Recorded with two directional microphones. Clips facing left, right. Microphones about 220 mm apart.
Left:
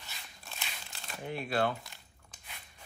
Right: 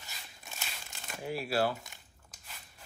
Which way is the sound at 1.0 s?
5° right (ahead or behind).